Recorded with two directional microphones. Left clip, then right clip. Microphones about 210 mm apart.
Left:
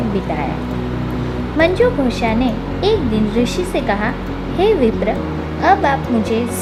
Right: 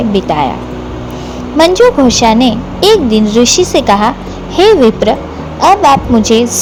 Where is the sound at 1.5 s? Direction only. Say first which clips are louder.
Right 8 dB; 30° right (ahead or behind).